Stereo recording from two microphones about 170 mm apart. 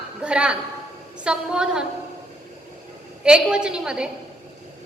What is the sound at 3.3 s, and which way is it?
Speech, 5° right (ahead or behind).